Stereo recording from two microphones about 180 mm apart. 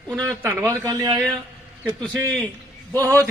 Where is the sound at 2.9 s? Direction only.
15° right (ahead or behind).